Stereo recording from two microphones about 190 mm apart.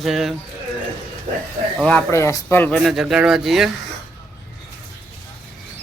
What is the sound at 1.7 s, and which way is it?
Speech, 5° left (ahead or behind).